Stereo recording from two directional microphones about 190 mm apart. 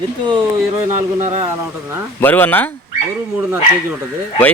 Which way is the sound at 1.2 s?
35° right (ahead or behind).